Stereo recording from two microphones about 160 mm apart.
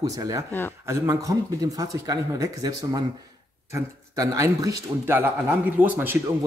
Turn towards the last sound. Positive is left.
turn(degrees=-15)  # may be behind; listen again after turning